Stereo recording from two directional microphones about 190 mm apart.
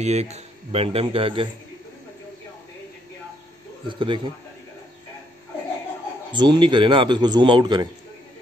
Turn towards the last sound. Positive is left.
turn(degrees=-20)  # may be behind; listen again after turning